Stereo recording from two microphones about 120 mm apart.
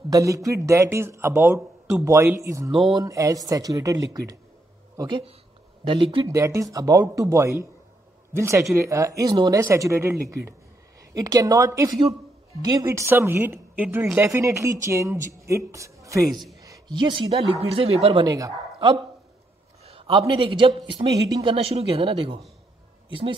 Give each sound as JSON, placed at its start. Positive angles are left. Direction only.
{"t": 0.1, "sound": "a man's voice", "side_deg": -25}
{"t": 6.2, "sound": "a man's voice", "side_deg": -25}
{"t": 14.2, "sound": "speech", "side_deg": -25}
{"t": 16.6, "sound": "a sound", "side_deg": -35}
{"t": 17.6, "sound": "a man's voice", "side_deg": -50}
{"t": 18.2, "sound": "speech", "side_deg": -35}
{"t": 19.8, "sound": "a man's voice", "side_deg": -50}
{"t": 21.5, "sound": "a man's voice", "side_deg": -55}